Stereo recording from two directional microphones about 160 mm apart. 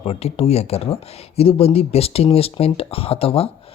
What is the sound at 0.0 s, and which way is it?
Speech, 40° left (ahead or behind).